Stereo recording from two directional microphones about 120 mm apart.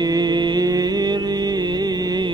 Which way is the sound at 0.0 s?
35° right (ahead or behind).